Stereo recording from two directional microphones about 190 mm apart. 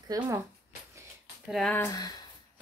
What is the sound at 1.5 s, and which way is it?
Speech, 5° left (ahead or behind).